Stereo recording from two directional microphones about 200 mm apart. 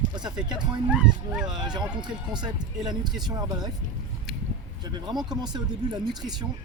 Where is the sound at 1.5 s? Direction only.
20° right (ahead or behind).